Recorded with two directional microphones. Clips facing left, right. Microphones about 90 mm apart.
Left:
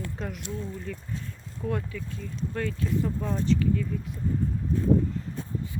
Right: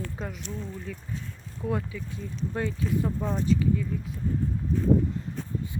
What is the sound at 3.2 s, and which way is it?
Speech, centre (ahead or behind).